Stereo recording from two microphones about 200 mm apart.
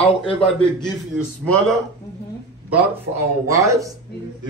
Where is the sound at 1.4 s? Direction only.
5° left (ahead or behind).